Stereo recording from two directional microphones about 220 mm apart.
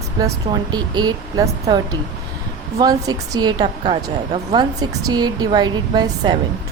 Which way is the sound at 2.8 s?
15° right (ahead or behind).